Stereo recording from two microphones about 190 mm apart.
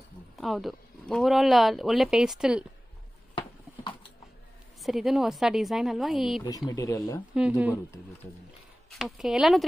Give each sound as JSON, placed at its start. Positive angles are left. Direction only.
{"t": 0.4, "sound": "speech", "side_deg": 0}
{"t": 4.8, "sound": "speech", "side_deg": 0}
{"t": 6.7, "sound": "speech", "side_deg": 15}
{"t": 7.3, "sound": "speech", "side_deg": -5}
{"t": 8.9, "sound": "speech", "side_deg": 0}